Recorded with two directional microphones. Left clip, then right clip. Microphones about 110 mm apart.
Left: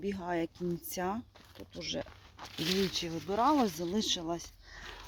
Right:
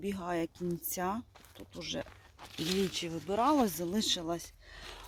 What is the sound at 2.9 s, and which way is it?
Speech, 5° right (ahead or behind).